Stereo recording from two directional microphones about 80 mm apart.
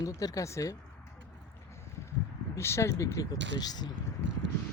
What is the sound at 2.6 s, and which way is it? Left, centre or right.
Speech, left.